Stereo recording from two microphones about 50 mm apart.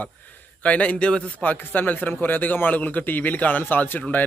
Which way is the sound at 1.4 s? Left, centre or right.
Left.